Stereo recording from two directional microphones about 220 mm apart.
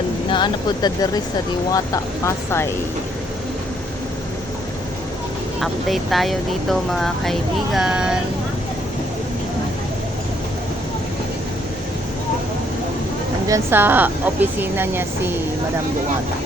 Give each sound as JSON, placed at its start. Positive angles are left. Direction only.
{"t": 0.3, "sound": "speech", "side_deg": 20}
{"t": 5.5, "sound": "speech", "side_deg": 0}
{"t": 13.5, "sound": "a woman's voice", "side_deg": -10}